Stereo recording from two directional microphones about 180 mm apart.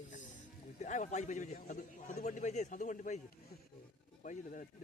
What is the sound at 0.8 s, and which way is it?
A man's voice, 40° left (ahead or behind).